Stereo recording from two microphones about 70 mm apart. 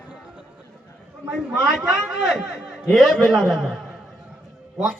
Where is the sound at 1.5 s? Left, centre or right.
Centre.